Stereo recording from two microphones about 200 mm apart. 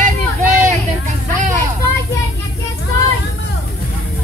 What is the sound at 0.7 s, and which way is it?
Vehicle, 40° right (ahead or behind).